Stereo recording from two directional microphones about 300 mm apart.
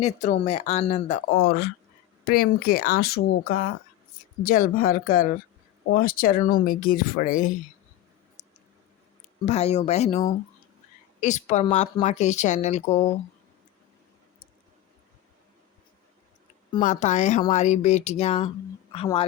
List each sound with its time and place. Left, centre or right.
0.0 s speech: left
8.4 s a sound: left
9.5 s speech: left
16.7 s speech: left